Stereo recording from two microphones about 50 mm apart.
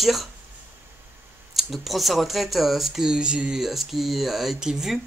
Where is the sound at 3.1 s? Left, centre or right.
Right.